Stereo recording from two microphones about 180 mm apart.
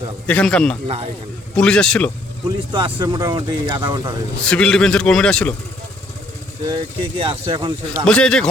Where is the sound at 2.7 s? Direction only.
25° right (ahead or behind).